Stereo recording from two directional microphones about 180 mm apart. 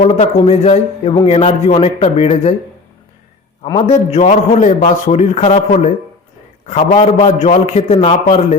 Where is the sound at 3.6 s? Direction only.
30° left (ahead or behind).